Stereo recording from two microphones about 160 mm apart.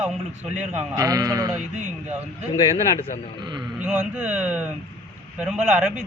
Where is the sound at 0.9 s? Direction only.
20° right (ahead or behind).